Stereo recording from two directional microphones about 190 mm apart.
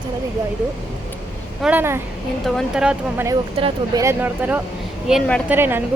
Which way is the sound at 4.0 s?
10° right (ahead or behind).